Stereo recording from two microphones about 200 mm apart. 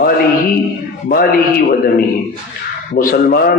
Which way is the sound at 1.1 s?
45° left (ahead or behind).